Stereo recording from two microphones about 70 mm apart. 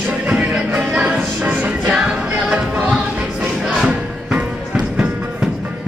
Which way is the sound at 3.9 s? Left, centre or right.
Centre.